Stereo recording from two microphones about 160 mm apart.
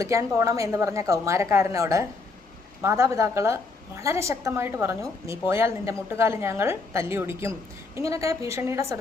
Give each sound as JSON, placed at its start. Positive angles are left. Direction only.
{"t": 0.0, "sound": "a woman's voice", "side_deg": -20}